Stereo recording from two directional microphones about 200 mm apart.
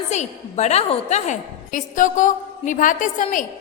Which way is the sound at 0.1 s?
35° left (ahead or behind).